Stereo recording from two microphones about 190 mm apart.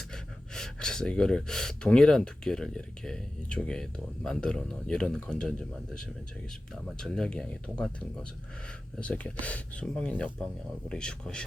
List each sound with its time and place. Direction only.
0.1 s speech: 5° left (ahead or behind)